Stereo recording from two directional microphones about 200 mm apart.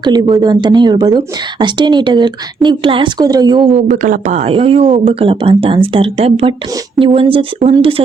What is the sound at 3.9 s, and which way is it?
Speech, 40° right (ahead or behind).